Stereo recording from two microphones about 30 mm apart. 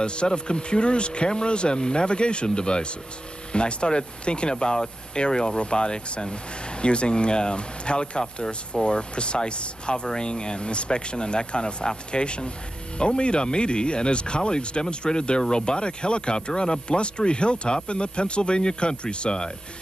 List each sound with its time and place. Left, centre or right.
0.0 s speech: left